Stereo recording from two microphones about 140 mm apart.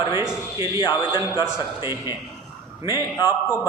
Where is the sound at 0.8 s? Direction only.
35° left (ahead or behind).